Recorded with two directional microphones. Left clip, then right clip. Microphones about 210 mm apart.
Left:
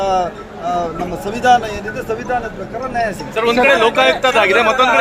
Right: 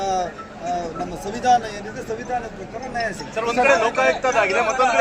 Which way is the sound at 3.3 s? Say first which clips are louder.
Left 5 dB; 55° left (ahead or behind).